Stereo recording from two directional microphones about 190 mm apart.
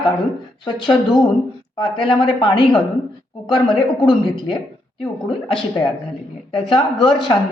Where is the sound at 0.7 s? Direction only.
25° left (ahead or behind).